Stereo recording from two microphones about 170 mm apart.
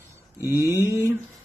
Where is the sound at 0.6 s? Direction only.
20° left (ahead or behind).